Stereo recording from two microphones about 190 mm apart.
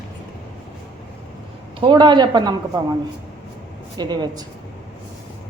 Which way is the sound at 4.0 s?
20° right (ahead or behind).